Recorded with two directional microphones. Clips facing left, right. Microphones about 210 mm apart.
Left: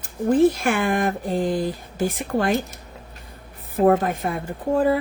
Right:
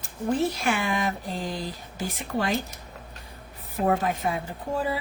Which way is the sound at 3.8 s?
50° left (ahead or behind).